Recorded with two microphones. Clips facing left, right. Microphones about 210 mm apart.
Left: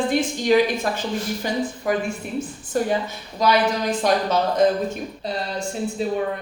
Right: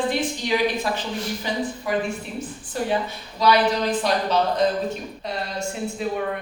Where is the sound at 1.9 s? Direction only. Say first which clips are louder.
Left 1 dB; 50° left (ahead or behind).